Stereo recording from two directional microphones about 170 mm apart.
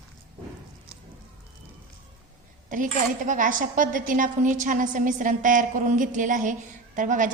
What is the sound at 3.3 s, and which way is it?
A woman's voice, 50° right (ahead or behind).